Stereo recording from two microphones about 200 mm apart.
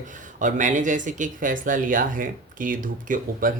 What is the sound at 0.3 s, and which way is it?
Speech, 40° right (ahead or behind).